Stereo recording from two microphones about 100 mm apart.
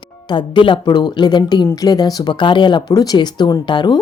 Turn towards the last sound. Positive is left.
turn(degrees=50)  # may be behind; listen again after turning